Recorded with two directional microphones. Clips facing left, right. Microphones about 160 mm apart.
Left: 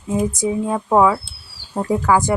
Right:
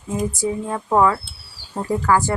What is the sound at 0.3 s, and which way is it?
Speech, 15° left (ahead or behind).